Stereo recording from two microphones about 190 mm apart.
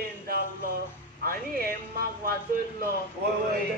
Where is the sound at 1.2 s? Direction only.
50° right (ahead or behind).